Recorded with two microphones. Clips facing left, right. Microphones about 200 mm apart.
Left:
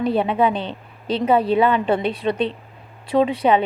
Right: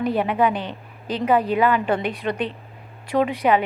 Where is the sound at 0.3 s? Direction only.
25° left (ahead or behind).